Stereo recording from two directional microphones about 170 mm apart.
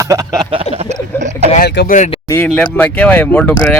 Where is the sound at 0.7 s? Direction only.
40° right (ahead or behind).